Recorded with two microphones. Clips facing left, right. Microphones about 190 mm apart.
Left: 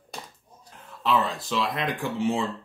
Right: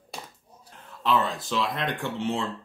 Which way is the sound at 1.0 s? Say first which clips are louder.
Even; centre (ahead or behind).